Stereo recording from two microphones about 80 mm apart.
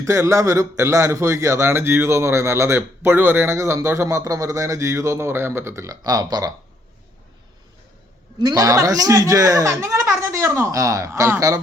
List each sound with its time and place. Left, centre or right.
0.0 s a man's voice: right
6.0 s speech: right
8.5 s speech: right